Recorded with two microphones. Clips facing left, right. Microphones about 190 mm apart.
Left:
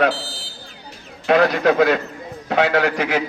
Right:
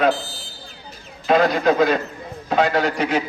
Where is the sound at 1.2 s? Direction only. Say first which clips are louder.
Left 1 dB; 70° left (ahead or behind).